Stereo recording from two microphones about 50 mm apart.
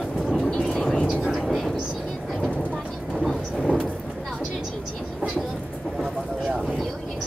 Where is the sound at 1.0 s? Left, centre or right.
Centre.